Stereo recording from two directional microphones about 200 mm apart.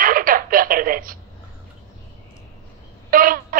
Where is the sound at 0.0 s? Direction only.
45° right (ahead or behind).